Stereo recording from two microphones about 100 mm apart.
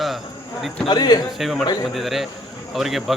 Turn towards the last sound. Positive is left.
turn(degrees=0)  # may be behind; listen again after turning